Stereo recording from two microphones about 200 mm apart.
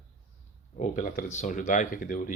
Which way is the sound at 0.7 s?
35° left (ahead or behind).